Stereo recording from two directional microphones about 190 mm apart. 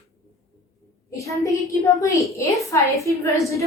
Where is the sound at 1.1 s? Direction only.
15° left (ahead or behind).